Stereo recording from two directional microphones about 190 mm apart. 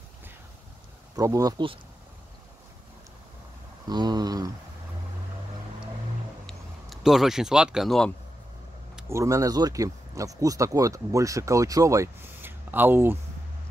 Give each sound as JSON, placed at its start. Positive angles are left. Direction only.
{"t": 1.1, "sound": "speech", "side_deg": -15}
{"t": 3.8, "sound": "speech", "side_deg": -20}
{"t": 6.4, "sound": "speech", "side_deg": 0}
{"t": 9.1, "sound": "speech", "side_deg": -15}